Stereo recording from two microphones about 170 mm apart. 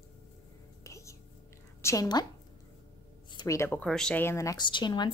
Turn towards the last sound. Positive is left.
turn(degrees=25)  # may be behind; listen again after turning